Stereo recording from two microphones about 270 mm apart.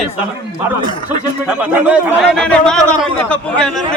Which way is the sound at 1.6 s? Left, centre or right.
Centre.